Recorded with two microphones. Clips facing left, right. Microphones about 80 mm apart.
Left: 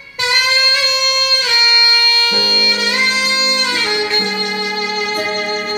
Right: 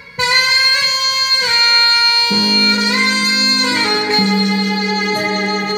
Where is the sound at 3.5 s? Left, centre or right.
Right.